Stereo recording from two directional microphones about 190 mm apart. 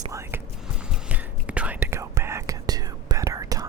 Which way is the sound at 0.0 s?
15° right (ahead or behind).